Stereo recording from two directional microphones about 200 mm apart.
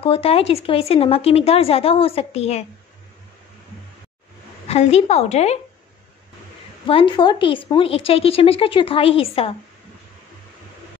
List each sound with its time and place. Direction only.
0.0 s speech: 30° left (ahead or behind)
4.6 s a woman's voice: 30° left (ahead or behind)
6.9 s speech: 25° left (ahead or behind)